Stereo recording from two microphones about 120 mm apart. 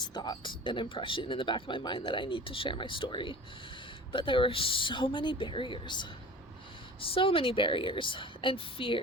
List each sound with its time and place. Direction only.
0.0 s speech: 35° left (ahead or behind)
7.1 s speech: 50° left (ahead or behind)